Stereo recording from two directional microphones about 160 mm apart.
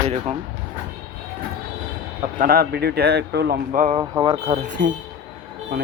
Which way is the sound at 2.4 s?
65° right (ahead or behind).